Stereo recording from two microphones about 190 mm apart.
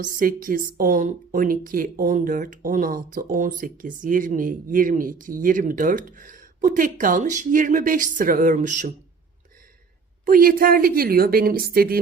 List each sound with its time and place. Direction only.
0.0 s speech: 45° right (ahead or behind)
10.2 s speech: 50° right (ahead or behind)